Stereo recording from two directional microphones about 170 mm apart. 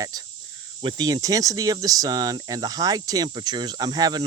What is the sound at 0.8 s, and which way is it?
Speech, 25° right (ahead or behind).